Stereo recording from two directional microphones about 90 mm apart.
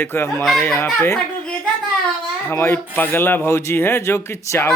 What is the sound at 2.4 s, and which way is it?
Speech, 25° left (ahead or behind).